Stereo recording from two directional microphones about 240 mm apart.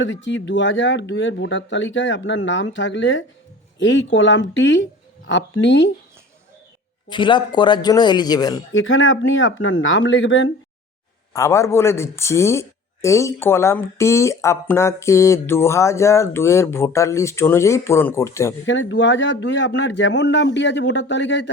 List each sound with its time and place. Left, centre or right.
0.0 s speech: left
7.1 s speech: centre
8.7 s speech: left
11.3 s speech: centre
18.6 s speech: left